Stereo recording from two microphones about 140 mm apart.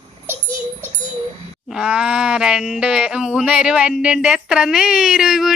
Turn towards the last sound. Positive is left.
turn(degrees=0)  # may be behind; listen again after turning